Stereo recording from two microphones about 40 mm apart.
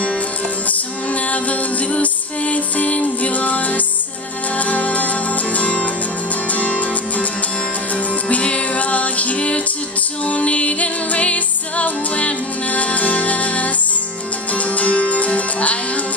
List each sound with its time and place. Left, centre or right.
1.3 s music: left
8.3 s music: left